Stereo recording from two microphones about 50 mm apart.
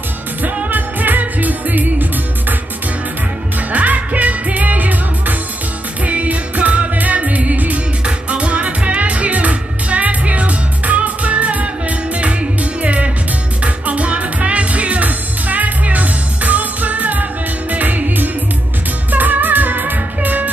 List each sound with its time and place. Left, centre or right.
0.4 s music: right
3.7 s music: right